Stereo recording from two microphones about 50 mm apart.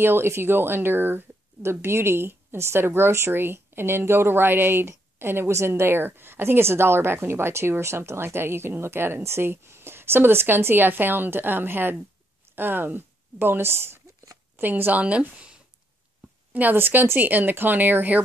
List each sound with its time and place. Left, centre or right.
0.0 s speech: right
3.4 s speech: right
5.5 s speech: right
14.6 s speech: right
16.7 s speech: right